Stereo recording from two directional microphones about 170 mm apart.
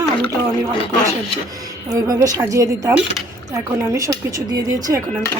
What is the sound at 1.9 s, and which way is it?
A woman's voice, 20° right (ahead or behind).